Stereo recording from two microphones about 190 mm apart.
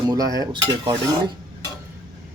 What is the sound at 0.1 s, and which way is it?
Cutlery, 20° right (ahead or behind).